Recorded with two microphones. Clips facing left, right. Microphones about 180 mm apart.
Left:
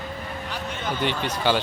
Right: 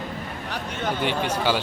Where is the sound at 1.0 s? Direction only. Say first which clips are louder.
Right 1 dB; 10° right (ahead or behind).